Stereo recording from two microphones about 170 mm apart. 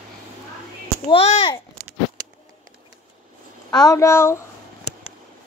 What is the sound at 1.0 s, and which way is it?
Speech, 35° left (ahead or behind).